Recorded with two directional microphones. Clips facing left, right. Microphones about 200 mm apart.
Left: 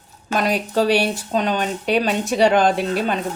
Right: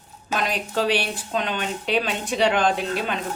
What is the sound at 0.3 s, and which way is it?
Speech, 40° left (ahead or behind).